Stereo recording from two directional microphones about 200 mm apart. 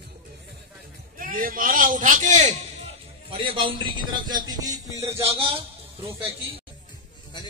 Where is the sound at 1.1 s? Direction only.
45° right (ahead or behind).